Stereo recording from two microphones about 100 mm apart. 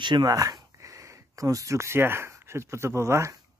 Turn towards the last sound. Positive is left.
turn(degrees=-30)  # may be behind; listen again after turning